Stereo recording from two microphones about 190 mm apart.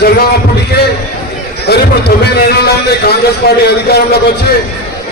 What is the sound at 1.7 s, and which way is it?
A man's voice, 60° left (ahead or behind).